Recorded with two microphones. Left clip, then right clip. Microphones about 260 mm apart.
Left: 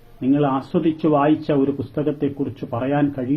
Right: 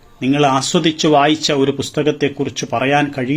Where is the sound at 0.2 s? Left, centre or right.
Right.